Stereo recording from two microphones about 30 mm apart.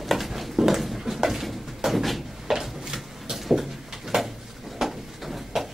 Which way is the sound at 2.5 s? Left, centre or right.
Centre.